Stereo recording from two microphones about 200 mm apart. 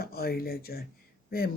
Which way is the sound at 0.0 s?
50° left (ahead or behind).